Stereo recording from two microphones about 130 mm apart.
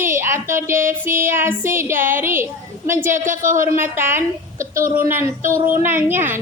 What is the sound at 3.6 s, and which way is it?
A woman's voice, 20° right (ahead or behind).